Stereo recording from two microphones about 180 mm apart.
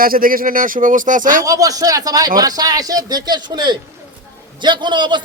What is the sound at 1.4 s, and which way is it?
A man's voice, 20° right (ahead or behind).